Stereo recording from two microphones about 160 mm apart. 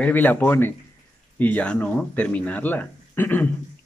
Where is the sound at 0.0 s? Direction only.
10° left (ahead or behind).